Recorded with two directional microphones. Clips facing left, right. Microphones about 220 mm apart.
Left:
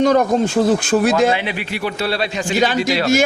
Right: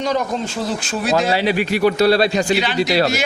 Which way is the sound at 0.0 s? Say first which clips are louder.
Left 7 dB; 50° left (ahead or behind).